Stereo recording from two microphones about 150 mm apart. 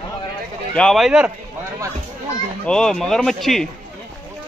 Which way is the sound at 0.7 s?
5° left (ahead or behind).